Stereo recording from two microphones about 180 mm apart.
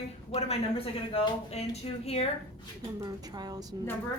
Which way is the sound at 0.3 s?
35° left (ahead or behind).